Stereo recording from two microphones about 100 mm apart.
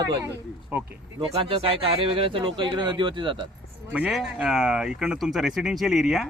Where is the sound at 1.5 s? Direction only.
65° right (ahead or behind).